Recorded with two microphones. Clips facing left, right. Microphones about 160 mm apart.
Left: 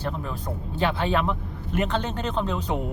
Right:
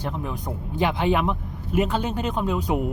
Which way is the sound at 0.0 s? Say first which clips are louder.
Right 1 dB; 15° right (ahead or behind).